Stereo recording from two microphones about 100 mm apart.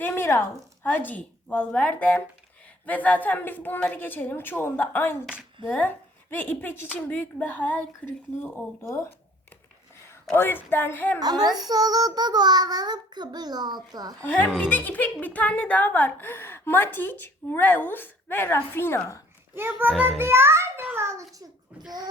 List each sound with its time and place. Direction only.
0.0 s a woman's voice: 25° left (ahead or behind)
10.3 s a woman's voice: 20° left (ahead or behind)
11.2 s child singing: 40° right (ahead or behind)
14.2 s a woman's voice: 20° left (ahead or behind)
19.5 s a child's voice: 20° right (ahead or behind)